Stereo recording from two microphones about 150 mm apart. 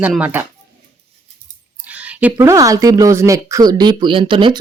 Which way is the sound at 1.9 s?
10° right (ahead or behind).